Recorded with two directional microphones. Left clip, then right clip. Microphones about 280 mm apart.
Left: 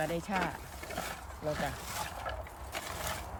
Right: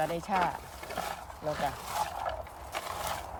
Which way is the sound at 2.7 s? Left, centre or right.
Centre.